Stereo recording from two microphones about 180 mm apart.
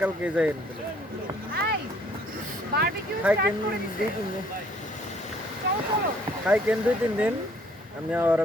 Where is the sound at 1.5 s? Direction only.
60° right (ahead or behind).